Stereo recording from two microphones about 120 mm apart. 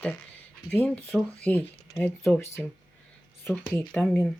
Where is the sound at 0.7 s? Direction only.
15° left (ahead or behind).